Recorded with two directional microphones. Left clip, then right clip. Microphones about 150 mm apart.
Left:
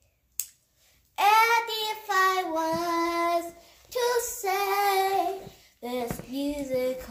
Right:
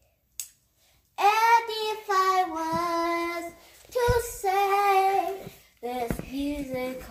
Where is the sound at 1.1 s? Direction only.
55° left (ahead or behind).